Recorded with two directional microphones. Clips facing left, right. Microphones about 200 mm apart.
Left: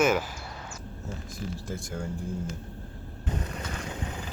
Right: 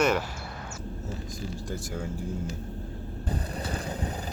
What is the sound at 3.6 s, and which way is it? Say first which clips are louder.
Vehicle: right 3 dB; 35° right (ahead or behind).